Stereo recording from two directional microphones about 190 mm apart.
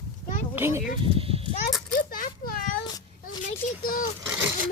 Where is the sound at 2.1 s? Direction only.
50° left (ahead or behind).